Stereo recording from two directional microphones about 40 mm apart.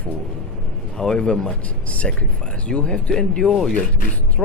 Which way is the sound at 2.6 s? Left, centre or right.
Left.